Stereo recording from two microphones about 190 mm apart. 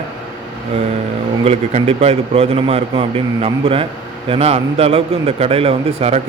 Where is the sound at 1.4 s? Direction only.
35° right (ahead or behind).